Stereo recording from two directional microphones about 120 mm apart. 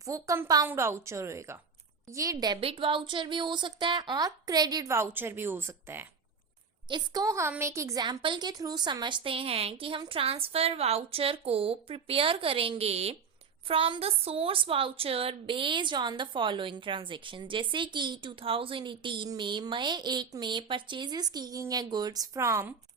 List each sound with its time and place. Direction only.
0.0 s a woman's voice: 30° right (ahead or behind)
2.6 s a woman's voice: 50° right (ahead or behind); by 6.1 s 20° right (ahead or behind)
6.8 s a woman's voice: 35° right (ahead or behind)
8.0 s a woman's voice: 40° right (ahead or behind); by 22.7 s 25° right (ahead or behind)